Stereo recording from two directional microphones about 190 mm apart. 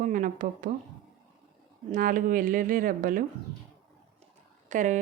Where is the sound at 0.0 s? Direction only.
45° right (ahead or behind).